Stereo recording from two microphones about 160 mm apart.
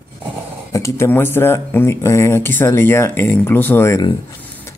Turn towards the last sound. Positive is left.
turn(degrees=15)  # may be behind; listen again after turning